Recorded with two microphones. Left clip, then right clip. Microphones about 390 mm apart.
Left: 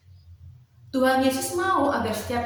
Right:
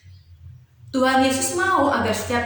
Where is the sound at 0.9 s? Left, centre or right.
Left.